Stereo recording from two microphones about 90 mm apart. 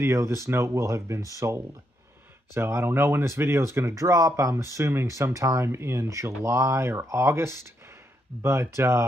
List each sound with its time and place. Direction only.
0.0 s speech: 30° right (ahead or behind)